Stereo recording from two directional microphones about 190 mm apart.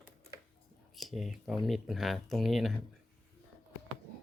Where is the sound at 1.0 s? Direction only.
Centre (ahead or behind).